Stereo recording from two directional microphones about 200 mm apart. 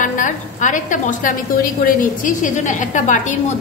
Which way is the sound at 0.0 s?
40° left (ahead or behind).